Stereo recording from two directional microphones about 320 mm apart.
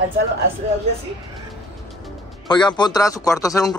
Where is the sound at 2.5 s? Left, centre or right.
Centre.